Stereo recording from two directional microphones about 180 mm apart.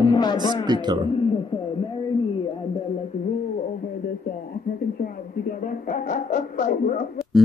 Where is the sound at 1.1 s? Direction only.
25° left (ahead or behind).